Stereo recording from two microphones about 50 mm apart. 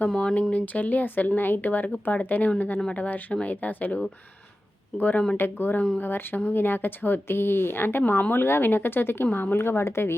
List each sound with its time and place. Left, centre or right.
0.2 s speech: left
0.5 s speech: left
5.4 s speech: left
9.6 s a woman's voice: left